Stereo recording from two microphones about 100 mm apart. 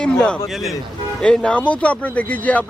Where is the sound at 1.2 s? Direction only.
10° left (ahead or behind).